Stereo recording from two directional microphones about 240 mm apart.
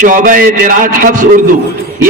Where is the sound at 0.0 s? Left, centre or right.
Right.